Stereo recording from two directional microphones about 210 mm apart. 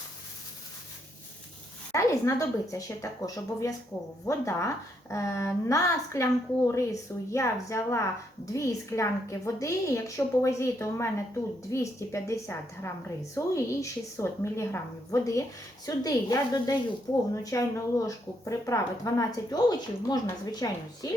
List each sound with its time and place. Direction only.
1.9 s a woman's voice: 15° left (ahead or behind)